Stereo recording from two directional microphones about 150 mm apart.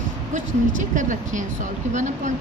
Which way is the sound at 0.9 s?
60° right (ahead or behind).